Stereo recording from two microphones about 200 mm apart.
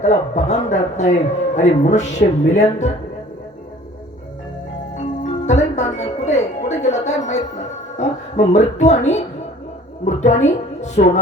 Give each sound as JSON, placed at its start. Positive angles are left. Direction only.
{"t": 0.0, "sound": "a man's voice", "side_deg": 35}
{"t": 5.5, "sound": "a man's voice", "side_deg": 35}